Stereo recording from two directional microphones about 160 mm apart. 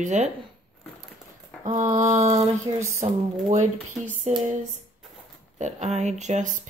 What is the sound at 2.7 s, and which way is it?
Speech, 30° right (ahead or behind).